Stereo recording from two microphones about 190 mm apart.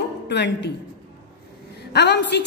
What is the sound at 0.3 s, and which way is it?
Speech, 65° left (ahead or behind).